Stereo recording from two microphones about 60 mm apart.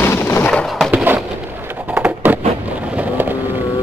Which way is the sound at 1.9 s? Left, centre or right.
Right.